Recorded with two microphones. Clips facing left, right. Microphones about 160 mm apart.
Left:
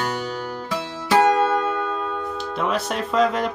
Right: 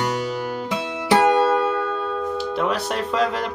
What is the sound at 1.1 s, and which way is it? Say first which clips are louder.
Music: even; 35° right (ahead or behind).